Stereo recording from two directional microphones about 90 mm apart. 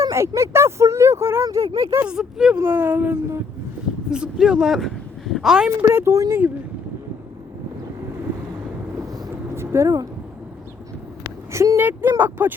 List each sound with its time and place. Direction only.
0.0 s speech: 35° right (ahead or behind)
2.0 s speech: 10° right (ahead or behind)
2.6 s speech: 20° right (ahead or behind)
4.1 s speech: 10° right (ahead or behind)
5.9 s speech: 30° right (ahead or behind)
9.0 s vehicle: 45° right (ahead or behind)
9.3 s a sound: 30° right (ahead or behind)
11.5 s speech: 35° right (ahead or behind)
11.8 s speech: 20° right (ahead or behind)